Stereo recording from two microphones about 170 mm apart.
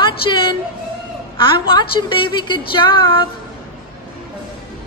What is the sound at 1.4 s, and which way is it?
A woman's voice, 25° left (ahead or behind).